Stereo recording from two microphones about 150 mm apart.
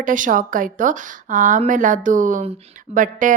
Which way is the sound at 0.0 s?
60° right (ahead or behind).